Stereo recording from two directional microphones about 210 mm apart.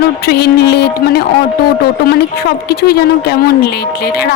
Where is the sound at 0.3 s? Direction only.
50° left (ahead or behind).